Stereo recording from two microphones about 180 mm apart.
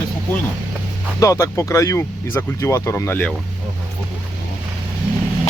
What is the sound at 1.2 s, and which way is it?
Speech, 15° left (ahead or behind).